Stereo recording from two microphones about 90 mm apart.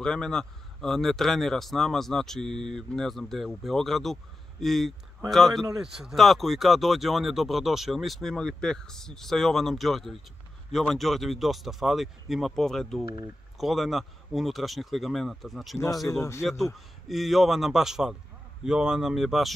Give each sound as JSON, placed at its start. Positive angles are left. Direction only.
{"t": 0.0, "sound": "speech", "side_deg": 5}
{"t": 5.9, "sound": "speech", "side_deg": 0}
{"t": 16.1, "sound": "speech", "side_deg": 30}
{"t": 17.1, "sound": "speech", "side_deg": 0}